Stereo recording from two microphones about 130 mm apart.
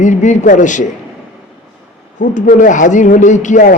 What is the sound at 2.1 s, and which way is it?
Speech, 75° left (ahead or behind).